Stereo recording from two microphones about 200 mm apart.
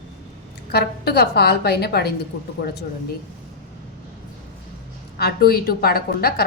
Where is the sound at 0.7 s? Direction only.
55° left (ahead or behind).